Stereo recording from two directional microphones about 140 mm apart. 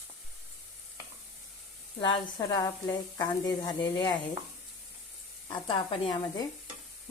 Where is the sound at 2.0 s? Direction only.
35° left (ahead or behind).